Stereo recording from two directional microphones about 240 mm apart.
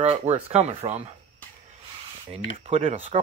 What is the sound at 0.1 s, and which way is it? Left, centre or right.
Speech, right.